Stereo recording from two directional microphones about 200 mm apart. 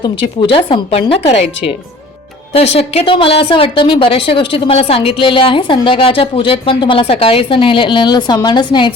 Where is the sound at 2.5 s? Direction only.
30° left (ahead or behind).